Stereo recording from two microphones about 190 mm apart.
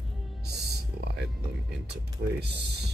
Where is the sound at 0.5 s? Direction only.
60° right (ahead or behind).